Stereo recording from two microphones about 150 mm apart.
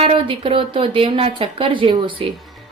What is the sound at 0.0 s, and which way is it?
A woman's voice, 35° right (ahead or behind).